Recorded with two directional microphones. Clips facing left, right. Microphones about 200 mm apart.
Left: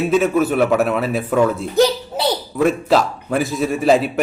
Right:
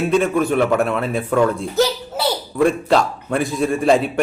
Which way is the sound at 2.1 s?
15° left (ahead or behind).